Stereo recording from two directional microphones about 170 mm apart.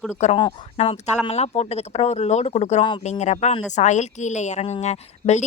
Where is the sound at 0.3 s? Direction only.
30° left (ahead or behind).